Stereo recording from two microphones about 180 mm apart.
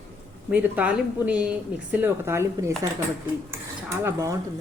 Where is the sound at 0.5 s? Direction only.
10° right (ahead or behind).